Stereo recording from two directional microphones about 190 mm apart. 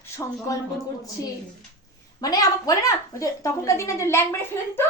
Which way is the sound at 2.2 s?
20° left (ahead or behind).